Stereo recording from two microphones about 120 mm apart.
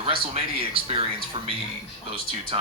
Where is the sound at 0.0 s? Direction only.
50° right (ahead or behind).